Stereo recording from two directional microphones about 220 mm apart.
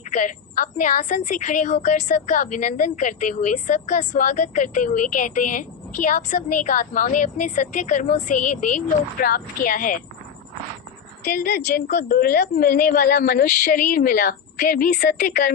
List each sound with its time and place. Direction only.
0.1 s a woman's voice: 35° left (ahead or behind)
11.3 s a woman's voice: 40° left (ahead or behind)